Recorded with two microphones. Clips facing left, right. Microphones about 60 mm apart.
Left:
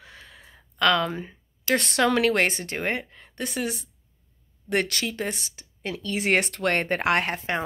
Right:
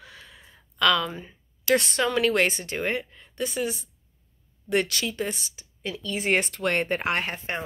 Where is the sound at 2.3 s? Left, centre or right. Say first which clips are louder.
Even; left.